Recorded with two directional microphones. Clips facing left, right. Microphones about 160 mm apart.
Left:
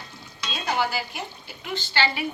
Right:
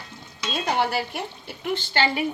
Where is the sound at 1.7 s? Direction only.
50° right (ahead or behind).